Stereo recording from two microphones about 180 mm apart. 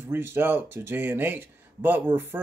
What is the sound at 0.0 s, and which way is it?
Speech, 10° right (ahead or behind).